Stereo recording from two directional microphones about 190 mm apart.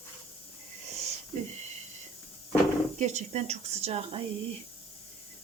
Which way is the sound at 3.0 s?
40° right (ahead or behind).